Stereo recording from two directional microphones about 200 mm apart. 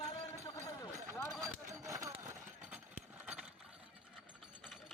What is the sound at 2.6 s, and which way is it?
Engine, 5° right (ahead or behind).